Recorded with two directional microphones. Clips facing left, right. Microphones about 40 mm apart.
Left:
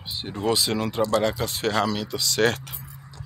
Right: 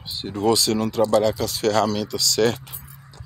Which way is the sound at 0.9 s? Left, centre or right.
Left.